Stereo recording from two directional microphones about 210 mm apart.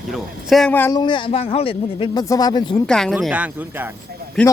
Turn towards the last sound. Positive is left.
turn(degrees=5)  # may be behind; listen again after turning